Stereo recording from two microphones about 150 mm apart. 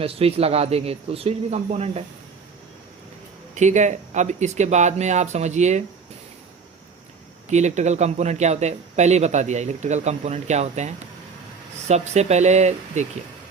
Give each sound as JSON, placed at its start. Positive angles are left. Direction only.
{"t": 0.0, "sound": "speech", "side_deg": -40}
{"t": 3.5, "sound": "speech", "side_deg": -50}
{"t": 7.5, "sound": "speech", "side_deg": -50}